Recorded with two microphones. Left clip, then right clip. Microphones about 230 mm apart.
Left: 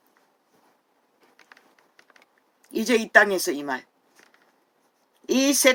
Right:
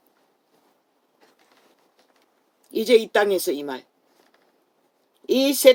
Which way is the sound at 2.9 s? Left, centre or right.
Left.